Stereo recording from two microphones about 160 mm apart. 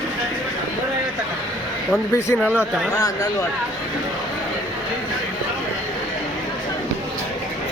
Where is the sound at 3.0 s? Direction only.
20° left (ahead or behind).